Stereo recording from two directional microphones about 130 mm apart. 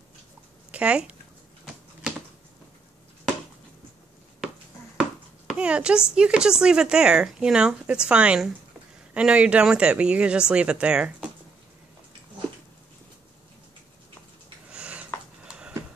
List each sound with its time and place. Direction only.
0.7 s speech: 10° right (ahead or behind)
5.5 s speech: 10° right (ahead or behind)
14.7 s a sound: 10° right (ahead or behind)